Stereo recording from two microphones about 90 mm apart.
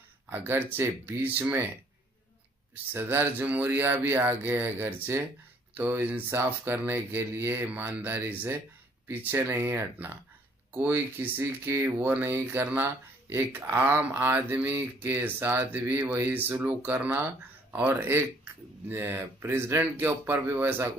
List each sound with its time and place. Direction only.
0.3 s speech: 25° right (ahead or behind)
2.7 s speech: 25° right (ahead or behind)